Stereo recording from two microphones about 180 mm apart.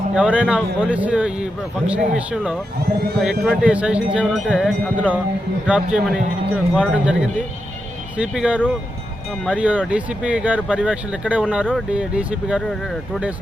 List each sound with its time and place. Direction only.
0.1 s speech: 5° right (ahead or behind)
2.8 s speech: 60° right (ahead or behind)
3.2 s speech: centre (ahead or behind)